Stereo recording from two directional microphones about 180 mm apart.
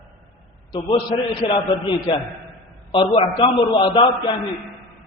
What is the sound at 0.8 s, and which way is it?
A man's voice, 30° left (ahead or behind).